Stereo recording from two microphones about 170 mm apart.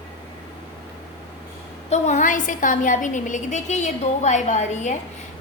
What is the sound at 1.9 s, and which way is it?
A woman's voice, 45° left (ahead or behind).